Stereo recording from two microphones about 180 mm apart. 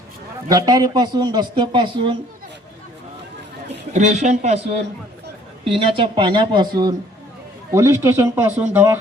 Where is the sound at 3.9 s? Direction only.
40° right (ahead or behind).